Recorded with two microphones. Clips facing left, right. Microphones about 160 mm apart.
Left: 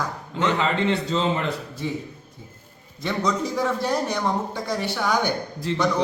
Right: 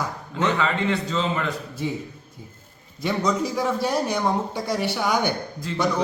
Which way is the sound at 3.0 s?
10° right (ahead or behind).